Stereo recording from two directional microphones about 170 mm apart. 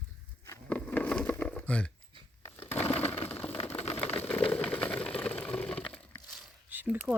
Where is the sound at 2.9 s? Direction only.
35° left (ahead or behind).